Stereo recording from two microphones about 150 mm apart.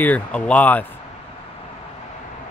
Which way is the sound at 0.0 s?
10° left (ahead or behind).